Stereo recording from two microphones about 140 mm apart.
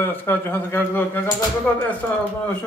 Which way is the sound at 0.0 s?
15° left (ahead or behind).